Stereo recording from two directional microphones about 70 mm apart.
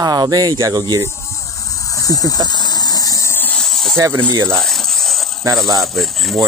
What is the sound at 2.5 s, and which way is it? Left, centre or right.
Engine, left.